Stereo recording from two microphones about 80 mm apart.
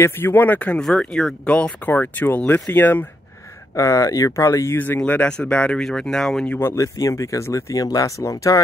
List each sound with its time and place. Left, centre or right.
0.0 s speech: left
0.7 s speech: centre
1.5 s speech: centre
3.7 s speech: left
5.0 s speech: left; by 6.4 s centre
6.7 s speech: left